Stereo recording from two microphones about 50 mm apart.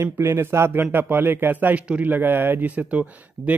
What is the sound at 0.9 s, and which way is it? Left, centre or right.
Speech, right.